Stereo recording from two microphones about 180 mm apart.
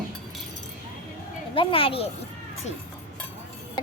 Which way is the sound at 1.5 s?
30° left (ahead or behind).